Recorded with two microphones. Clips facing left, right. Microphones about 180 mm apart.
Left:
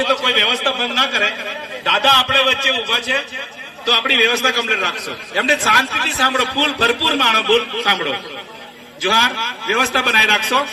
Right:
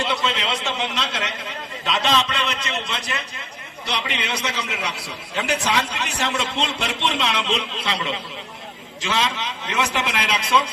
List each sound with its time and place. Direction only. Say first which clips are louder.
0.1 s a man's voice: left 5 dB; 80° left
3.8 s a man's voice: left 9 dB; 70° left (ahead or behind)
9.0 s a man's voice: left 4 dB; 90° left